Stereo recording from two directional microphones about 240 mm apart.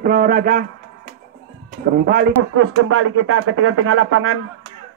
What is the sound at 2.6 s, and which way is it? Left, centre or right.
Speech, right.